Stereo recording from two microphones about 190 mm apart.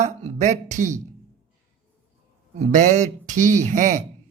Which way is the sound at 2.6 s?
40° right (ahead or behind).